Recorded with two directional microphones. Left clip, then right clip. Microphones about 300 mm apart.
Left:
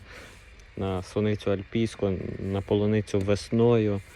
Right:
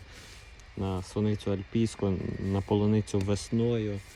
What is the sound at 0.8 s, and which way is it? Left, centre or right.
Speech, centre.